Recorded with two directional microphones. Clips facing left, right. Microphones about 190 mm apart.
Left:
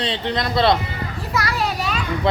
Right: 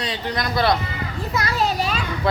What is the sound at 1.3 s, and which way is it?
Children playing, 25° right (ahead or behind).